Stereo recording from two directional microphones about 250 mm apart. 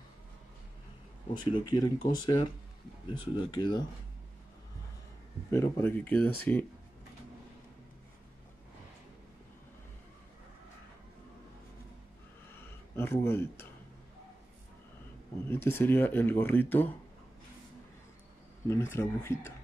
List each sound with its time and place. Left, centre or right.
1.3 s speech: centre
5.5 s speech: centre
12.5 s a sound: centre
15.4 s speech: centre
18.7 s speech: centre